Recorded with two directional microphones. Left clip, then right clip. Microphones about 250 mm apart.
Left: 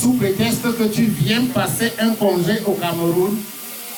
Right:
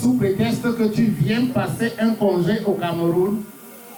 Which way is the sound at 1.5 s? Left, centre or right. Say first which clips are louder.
Left 3 dB; centre.